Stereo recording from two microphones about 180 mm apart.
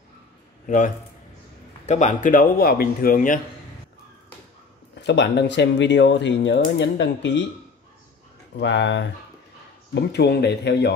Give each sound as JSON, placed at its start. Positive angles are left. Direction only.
{"t": 0.7, "sound": "speech", "side_deg": 45}
{"t": 5.0, "sound": "speech", "side_deg": 75}
{"t": 8.5, "sound": "speech", "side_deg": 80}
{"t": 9.9, "sound": "speech", "side_deg": 65}